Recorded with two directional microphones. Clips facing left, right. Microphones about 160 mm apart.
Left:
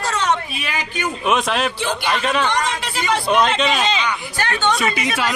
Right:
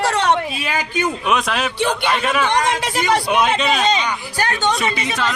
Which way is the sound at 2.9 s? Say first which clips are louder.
Right 2 dB; 40° right (ahead or behind).